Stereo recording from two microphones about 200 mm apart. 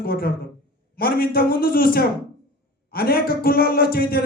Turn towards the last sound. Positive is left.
turn(degrees=50)  # may be behind; listen again after turning